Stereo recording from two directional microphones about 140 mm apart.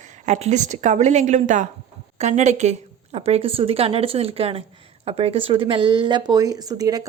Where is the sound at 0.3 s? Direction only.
55° right (ahead or behind).